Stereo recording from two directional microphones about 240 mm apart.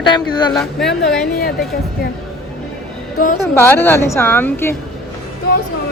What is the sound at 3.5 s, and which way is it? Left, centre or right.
Speech, centre.